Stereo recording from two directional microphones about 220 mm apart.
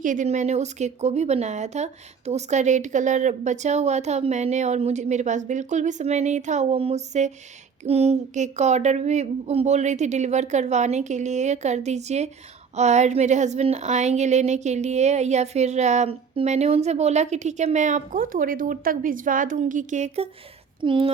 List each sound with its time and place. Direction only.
0.0 s speech: 35° right (ahead or behind)